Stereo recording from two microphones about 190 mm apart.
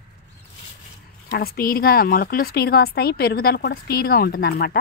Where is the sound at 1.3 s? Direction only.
50° left (ahead or behind).